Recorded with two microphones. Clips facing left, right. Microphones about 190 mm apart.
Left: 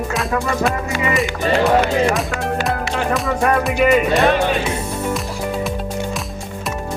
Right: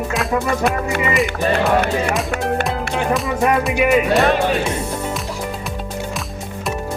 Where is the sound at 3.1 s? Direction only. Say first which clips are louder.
Even; centre (ahead or behind).